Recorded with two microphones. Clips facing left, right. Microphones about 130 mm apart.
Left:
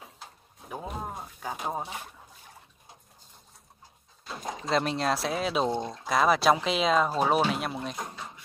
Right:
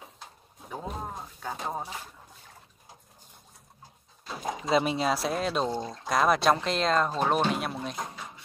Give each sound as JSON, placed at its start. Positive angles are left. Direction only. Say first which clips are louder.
{"t": 0.7, "sound": "speech", "louder": "even", "side_deg": 0}
{"t": 4.2, "sound": "a sound", "louder": "right 3 dB", "side_deg": 0}
{"t": 4.6, "sound": "speech", "louder": "right 1 dB", "side_deg": 0}
{"t": 5.7, "sound": "speech", "louder": "left 2 dB", "side_deg": 25}
{"t": 6.0, "sound": "speech", "louder": "left 1 dB", "side_deg": 0}